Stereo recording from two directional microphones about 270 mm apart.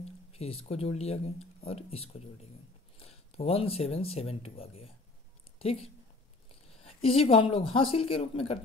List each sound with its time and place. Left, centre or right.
0.3 s speech: left